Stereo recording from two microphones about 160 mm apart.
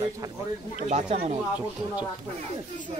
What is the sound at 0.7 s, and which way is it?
Speech, 50° right (ahead or behind).